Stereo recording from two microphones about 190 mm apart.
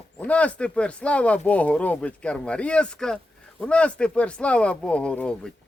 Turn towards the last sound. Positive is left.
turn(degrees=5)  # may be behind; listen again after turning